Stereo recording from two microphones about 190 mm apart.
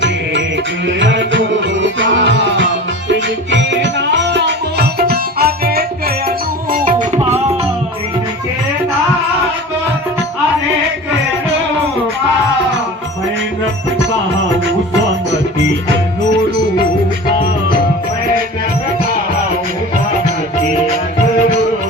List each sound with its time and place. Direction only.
0.9 s music: 70° right (ahead or behind); by 7.2 s 40° right (ahead or behind)